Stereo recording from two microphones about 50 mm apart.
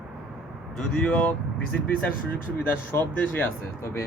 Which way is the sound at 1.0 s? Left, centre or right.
Left.